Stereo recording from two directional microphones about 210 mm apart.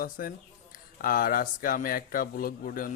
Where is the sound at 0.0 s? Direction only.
40° left (ahead or behind).